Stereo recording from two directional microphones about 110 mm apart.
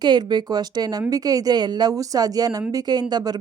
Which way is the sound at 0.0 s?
45° right (ahead or behind).